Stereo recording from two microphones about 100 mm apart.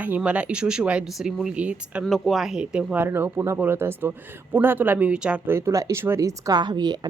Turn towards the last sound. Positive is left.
turn(degrees=-45)  # may be behind; listen again after turning